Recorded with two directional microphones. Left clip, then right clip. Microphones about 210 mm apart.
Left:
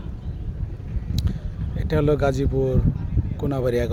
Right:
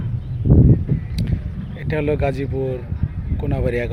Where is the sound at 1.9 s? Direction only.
15° left (ahead or behind).